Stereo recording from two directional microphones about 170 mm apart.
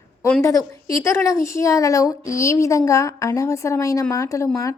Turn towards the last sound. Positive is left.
turn(degrees=20)  # may be behind; listen again after turning